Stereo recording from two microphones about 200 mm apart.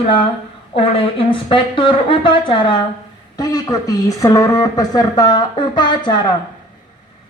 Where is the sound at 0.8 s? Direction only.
25° left (ahead or behind).